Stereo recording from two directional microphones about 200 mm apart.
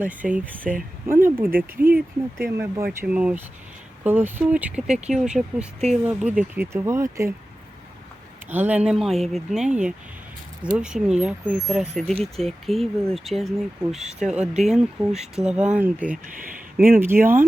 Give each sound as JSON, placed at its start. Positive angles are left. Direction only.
{"t": 0.0, "sound": "speech", "side_deg": -10}
{"t": 0.6, "sound": "speech", "side_deg": -45}
{"t": 1.0, "sound": "speech", "side_deg": -10}
{"t": 8.4, "sound": "speech", "side_deg": -10}